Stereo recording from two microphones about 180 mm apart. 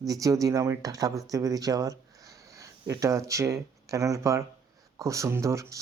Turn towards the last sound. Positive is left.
turn(degrees=-15)  # may be behind; listen again after turning